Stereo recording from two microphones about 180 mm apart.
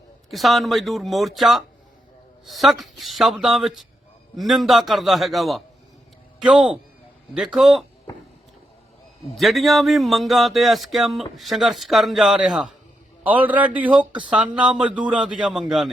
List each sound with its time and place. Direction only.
0.3 s speech: centre (ahead or behind)
8.1 s a sound: 20° left (ahead or behind)
9.3 s a man's voice: centre (ahead or behind)